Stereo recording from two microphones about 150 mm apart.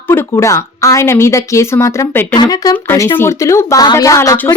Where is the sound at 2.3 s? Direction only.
25° left (ahead or behind).